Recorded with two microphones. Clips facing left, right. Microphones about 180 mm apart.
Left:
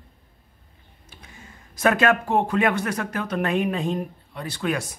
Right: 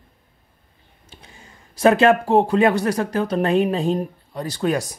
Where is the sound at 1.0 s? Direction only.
30° right (ahead or behind).